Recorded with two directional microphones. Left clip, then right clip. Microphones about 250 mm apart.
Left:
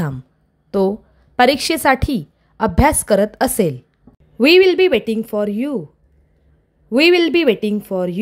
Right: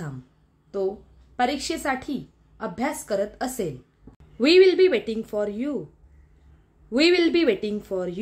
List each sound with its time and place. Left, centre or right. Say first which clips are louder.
0.7 s a woman's voice: left 10 dB; left
6.9 s speech: left 7 dB; left